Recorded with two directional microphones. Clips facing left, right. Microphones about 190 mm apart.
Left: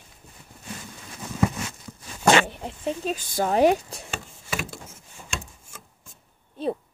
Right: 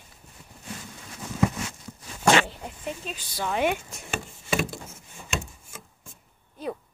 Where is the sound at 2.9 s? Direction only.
45° left (ahead or behind).